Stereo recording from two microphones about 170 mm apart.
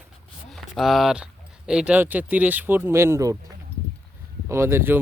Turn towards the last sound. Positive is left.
turn(degrees=-15)  # may be behind; listen again after turning